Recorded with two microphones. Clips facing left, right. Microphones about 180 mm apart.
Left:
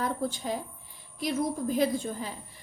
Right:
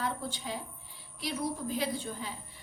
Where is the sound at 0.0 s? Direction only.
45° left (ahead or behind).